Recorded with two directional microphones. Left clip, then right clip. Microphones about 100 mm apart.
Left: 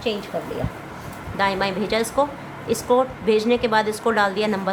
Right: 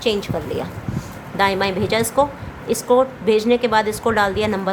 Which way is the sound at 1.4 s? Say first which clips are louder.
Right 3 dB; 30° right (ahead or behind).